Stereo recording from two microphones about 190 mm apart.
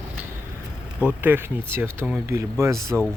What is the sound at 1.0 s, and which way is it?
Speech, 10° right (ahead or behind).